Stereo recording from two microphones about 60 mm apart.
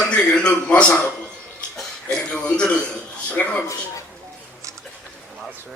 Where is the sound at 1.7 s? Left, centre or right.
Centre.